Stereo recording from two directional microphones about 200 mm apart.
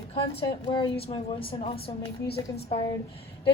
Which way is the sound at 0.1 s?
25° left (ahead or behind).